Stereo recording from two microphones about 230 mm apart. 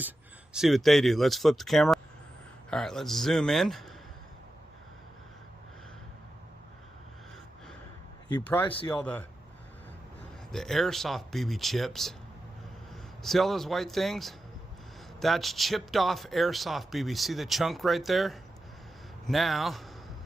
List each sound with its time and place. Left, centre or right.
0.5 s speech: centre
8.7 s speech: left
9.0 s speech: centre
10.5 s speech: centre